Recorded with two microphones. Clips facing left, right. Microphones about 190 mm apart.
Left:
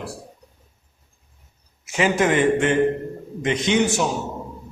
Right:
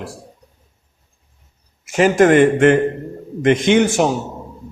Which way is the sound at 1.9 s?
45° right (ahead or behind).